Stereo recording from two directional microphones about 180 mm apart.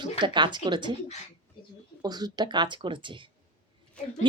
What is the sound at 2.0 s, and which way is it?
Speech, 20° right (ahead or behind).